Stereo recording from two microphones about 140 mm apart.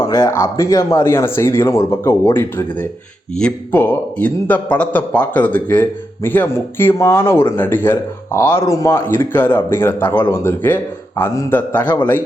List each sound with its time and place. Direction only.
0.0 s a man's voice: 25° left (ahead or behind)